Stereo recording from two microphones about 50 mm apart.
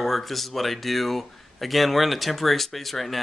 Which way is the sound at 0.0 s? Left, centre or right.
Centre.